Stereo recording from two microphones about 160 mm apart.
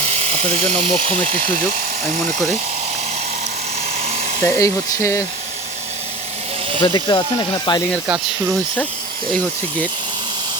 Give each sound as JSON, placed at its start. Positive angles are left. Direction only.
{"t": 0.1, "sound": "speech", "side_deg": -45}
{"t": 1.3, "sound": "speech", "side_deg": -60}
{"t": 4.4, "sound": "speech", "side_deg": 15}
{"t": 6.8, "sound": "speech", "side_deg": 30}